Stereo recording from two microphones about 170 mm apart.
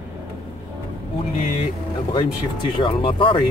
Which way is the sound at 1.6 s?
30° left (ahead or behind).